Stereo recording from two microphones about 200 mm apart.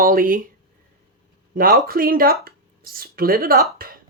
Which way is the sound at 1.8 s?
45° right (ahead or behind).